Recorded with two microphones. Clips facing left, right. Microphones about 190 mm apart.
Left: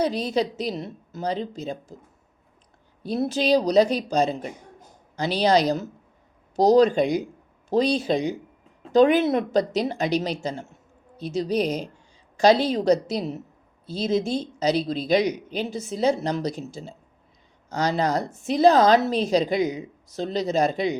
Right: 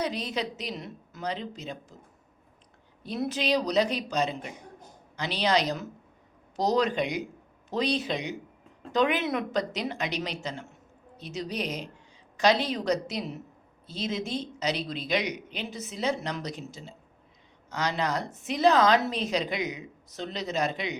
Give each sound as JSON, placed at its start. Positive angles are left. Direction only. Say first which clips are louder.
{"t": 0.0, "sound": "speech", "louder": "left 7 dB", "side_deg": 30}
{"t": 3.0, "sound": "speech", "louder": "left 6 dB", "side_deg": 35}